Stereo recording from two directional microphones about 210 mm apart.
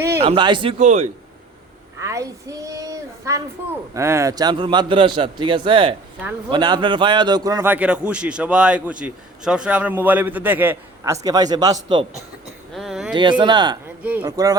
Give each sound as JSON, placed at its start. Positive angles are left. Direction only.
{"t": 0.2, "sound": "a man's voice", "side_deg": -25}
{"t": 2.0, "sound": "a sound", "side_deg": -15}
{"t": 3.9, "sound": "a man's voice", "side_deg": -15}
{"t": 12.7, "sound": "a sound", "side_deg": 0}
{"t": 13.4, "sound": "a man's voice", "side_deg": -20}
{"t": 14.0, "sound": "a man's voice", "side_deg": -10}